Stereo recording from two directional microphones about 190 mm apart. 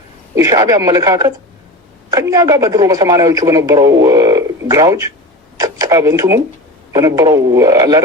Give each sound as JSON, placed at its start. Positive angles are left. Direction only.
{"t": 0.3, "sound": "speech", "side_deg": -20}